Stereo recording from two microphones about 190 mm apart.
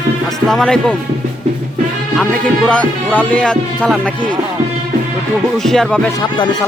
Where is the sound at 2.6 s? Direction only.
5° left (ahead or behind).